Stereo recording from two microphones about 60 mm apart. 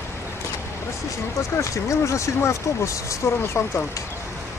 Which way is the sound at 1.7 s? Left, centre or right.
Left.